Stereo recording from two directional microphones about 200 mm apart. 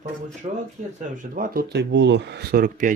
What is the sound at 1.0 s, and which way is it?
Speech, 40° right (ahead or behind).